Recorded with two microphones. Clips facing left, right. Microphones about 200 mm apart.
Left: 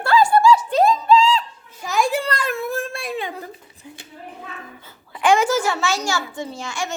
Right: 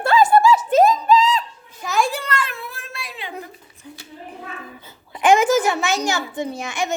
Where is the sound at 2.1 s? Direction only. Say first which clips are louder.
Left 3 dB; 35° left (ahead or behind).